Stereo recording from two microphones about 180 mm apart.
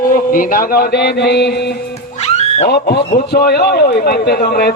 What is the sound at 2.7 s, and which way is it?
A man's voice, 65° left (ahead or behind).